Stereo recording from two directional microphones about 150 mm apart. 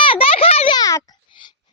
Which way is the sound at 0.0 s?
35° left (ahead or behind).